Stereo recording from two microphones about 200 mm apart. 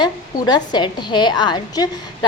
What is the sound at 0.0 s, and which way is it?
Speech, 20° left (ahead or behind).